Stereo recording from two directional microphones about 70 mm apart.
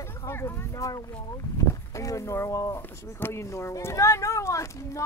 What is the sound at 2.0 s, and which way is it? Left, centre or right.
Speech, left.